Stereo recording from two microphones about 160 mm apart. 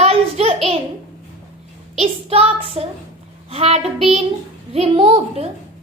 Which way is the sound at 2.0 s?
40° right (ahead or behind).